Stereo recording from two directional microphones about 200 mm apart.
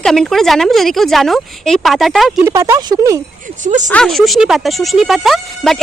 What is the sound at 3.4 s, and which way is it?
Speech, 40° right (ahead or behind).